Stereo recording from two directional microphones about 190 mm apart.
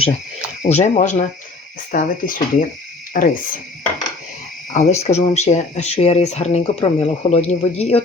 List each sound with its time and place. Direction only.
0.6 s speech: 40° left (ahead or behind)
4.7 s speech: 40° left (ahead or behind)